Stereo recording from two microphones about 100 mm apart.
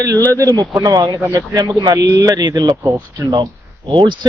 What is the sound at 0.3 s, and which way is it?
Speech, 35° right (ahead or behind).